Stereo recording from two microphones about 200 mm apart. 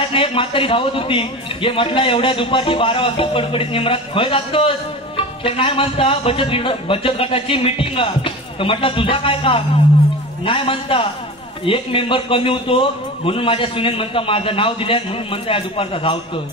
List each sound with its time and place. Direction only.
0.1 s a man's voice: 25° left (ahead or behind)